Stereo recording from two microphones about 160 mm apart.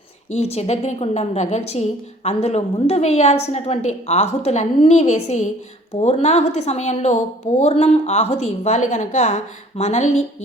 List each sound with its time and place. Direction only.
0.3 s a woman's voice: 40° left (ahead or behind)